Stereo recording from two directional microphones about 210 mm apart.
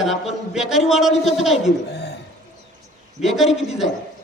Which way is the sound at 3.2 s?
Centre (ahead or behind).